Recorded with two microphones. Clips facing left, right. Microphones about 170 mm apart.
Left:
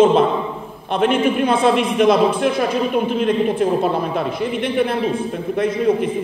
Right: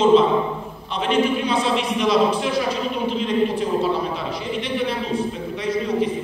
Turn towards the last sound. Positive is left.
turn(degrees=55)  # may be behind; listen again after turning